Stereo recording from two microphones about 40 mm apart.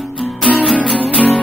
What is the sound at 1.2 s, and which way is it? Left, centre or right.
Music, right.